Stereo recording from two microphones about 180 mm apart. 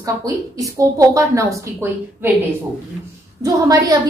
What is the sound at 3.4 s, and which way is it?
Speech, 20° right (ahead or behind).